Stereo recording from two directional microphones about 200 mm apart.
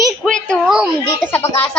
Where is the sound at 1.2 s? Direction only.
10° left (ahead or behind).